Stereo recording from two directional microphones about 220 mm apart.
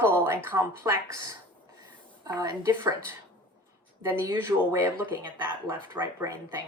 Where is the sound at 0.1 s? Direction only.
10° right (ahead or behind).